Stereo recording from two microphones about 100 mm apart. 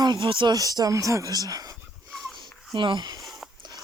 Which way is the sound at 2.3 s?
55° right (ahead or behind).